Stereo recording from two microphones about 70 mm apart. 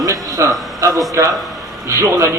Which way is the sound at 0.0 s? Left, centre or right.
Right.